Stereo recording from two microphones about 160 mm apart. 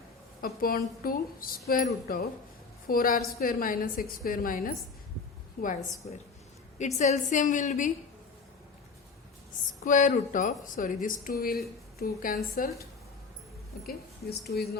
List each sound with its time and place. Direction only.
0.4 s speech: 65° left (ahead or behind)
6.7 s a woman's voice: 45° left (ahead or behind)
9.8 s speech: 55° left (ahead or behind)
13.8 s speech: 80° left